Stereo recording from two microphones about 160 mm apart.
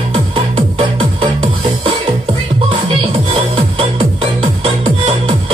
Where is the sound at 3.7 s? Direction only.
35° right (ahead or behind).